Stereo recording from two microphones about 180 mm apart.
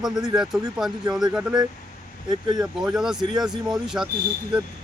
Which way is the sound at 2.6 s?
5° right (ahead or behind).